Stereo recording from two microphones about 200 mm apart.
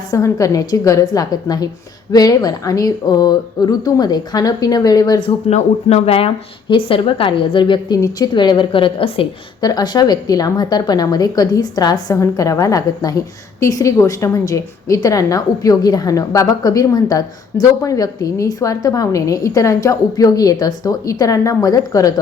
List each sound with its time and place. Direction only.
0.1 s a woman's voice: 15° left (ahead or behind)
5.5 s a woman's voice: 35° left (ahead or behind); by 22.1 s 15° left (ahead or behind)